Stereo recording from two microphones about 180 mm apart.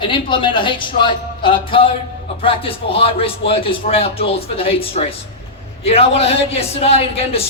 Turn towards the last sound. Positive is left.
turn(degrees=35)  # may be behind; listen again after turning